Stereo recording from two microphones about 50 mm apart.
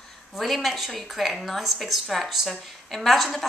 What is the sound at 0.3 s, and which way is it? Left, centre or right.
A woman's voice, centre.